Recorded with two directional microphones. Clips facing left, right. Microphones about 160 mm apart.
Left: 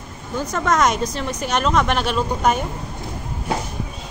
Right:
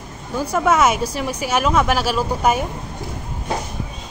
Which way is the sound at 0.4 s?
10° right (ahead or behind).